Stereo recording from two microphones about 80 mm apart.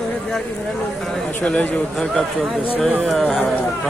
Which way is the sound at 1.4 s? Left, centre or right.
Centre.